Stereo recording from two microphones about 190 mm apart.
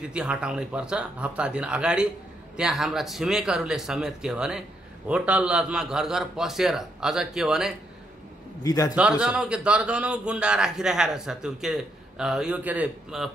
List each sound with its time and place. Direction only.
0.1 s speech: 5° right (ahead or behind)
8.6 s a man's voice: 20° left (ahead or behind)
9.2 s speech: 5° right (ahead or behind)